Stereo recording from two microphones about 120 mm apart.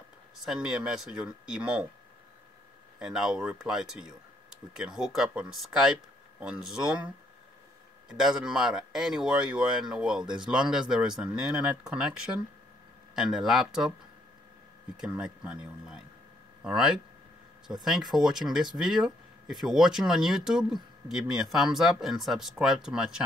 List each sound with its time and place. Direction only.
0.5 s speech: 5° right (ahead or behind)
3.0 s speech: 5° right (ahead or behind)
8.1 s speech: 5° right (ahead or behind)
15.0 s speech: 5° right (ahead or behind)